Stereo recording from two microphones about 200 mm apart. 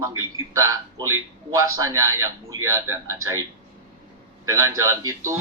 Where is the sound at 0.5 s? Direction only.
15° right (ahead or behind).